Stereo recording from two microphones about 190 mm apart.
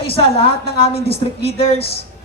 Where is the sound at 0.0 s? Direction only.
30° left (ahead or behind).